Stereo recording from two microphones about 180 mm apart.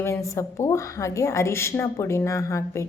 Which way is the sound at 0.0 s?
15° left (ahead or behind).